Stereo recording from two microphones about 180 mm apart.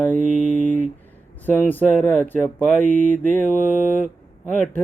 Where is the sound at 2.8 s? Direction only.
40° right (ahead or behind).